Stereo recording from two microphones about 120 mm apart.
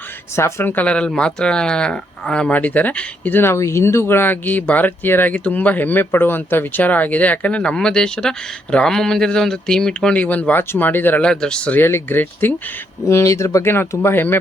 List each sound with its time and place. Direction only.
0.3 s speech: 20° left (ahead or behind)